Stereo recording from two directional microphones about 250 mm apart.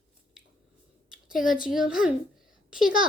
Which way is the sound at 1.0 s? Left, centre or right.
Centre.